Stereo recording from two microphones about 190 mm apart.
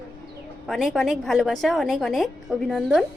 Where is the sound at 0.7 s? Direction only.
Centre (ahead or behind).